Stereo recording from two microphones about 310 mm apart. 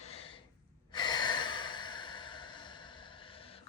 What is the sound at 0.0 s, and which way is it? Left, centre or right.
Gasp, centre.